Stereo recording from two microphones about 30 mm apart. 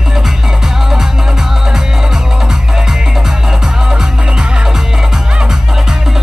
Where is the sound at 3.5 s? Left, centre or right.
Centre.